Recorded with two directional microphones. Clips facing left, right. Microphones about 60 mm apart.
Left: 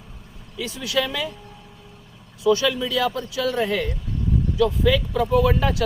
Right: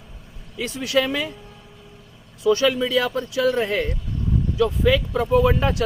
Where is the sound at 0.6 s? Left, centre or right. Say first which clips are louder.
Right 3 dB; right.